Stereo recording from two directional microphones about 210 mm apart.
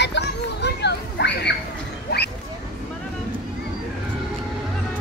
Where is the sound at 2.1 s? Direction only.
50° left (ahead or behind).